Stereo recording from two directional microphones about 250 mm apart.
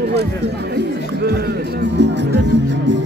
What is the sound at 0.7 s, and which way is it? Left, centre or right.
Speech, right.